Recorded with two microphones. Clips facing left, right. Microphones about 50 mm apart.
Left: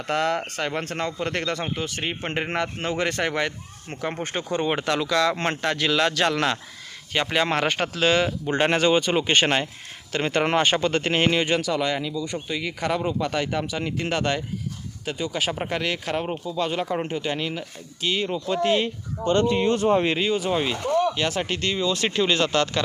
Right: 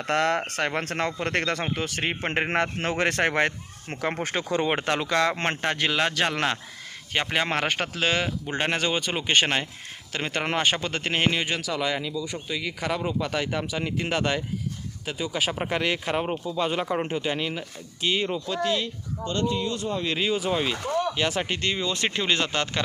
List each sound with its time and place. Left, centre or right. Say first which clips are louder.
0.0 s speech: even; right
1.7 s speech: even; right
2.5 s speech: right 1 dB; right
4.9 s speech: left 3 dB; right; by 18.4 s centre
18.6 s speech: left 6 dB; left
20.1 s speech: left 2 dB; centre